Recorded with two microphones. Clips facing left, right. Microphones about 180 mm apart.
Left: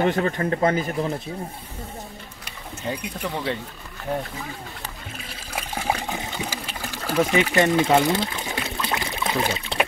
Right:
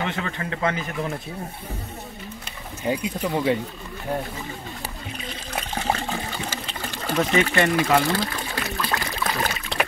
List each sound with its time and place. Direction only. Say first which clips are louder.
0.0 s speech: left 7 dB; 40° left (ahead or behind)
2.9 s speech: right 5 dB; 10° right (ahead or behind)
5.1 s water: right 2 dB; 5° left (ahead or behind)